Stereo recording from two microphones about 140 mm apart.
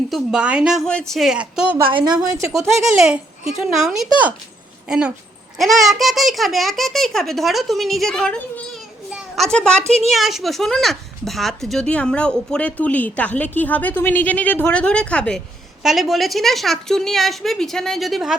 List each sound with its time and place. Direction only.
0.1 s a child's voice: 5° right (ahead or behind)
0.9 s a child's voice: 5° left (ahead or behind)
2.0 s a woman's voice: 30° right (ahead or behind)
2.8 s a child's voice: 5° right (ahead or behind)